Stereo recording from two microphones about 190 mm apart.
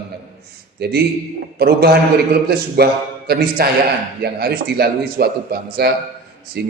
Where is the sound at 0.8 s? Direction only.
55° right (ahead or behind).